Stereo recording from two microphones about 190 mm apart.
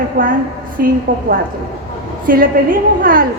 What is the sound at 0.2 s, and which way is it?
Speech, 50° right (ahead or behind).